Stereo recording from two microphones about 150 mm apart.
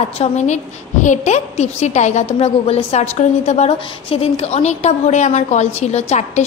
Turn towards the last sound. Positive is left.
turn(degrees=50)  # may be behind; listen again after turning